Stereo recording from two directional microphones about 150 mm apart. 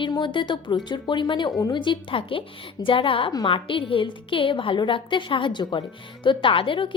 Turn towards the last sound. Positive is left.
turn(degrees=35)  # may be behind; listen again after turning